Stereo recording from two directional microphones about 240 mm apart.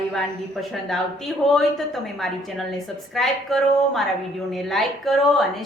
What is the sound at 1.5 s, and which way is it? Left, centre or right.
A woman's voice, centre.